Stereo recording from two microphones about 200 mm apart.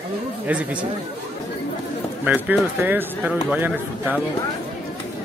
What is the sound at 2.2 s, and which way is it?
A man's voice, 10° right (ahead or behind).